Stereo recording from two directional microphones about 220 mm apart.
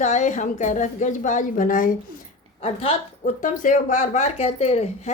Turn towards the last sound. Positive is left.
turn(degrees=30)  # may be behind; listen again after turning